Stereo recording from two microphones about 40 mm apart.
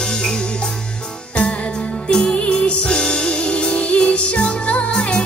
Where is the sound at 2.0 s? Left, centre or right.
Centre.